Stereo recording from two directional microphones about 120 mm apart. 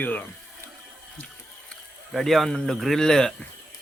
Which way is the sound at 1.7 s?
Centre (ahead or behind).